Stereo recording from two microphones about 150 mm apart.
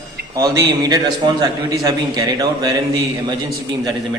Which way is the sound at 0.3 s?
20° right (ahead or behind).